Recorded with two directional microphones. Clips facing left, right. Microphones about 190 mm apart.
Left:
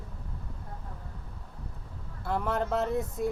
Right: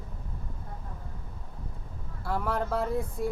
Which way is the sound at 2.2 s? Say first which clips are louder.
Left 1 dB; 20° left (ahead or behind).